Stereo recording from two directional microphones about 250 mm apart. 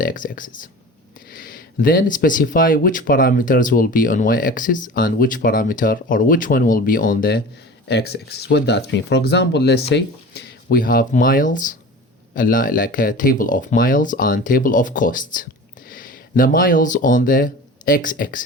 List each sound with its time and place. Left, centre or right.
0.0 s speech: left